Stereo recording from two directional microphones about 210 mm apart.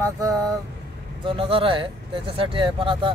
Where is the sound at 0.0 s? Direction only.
15° right (ahead or behind).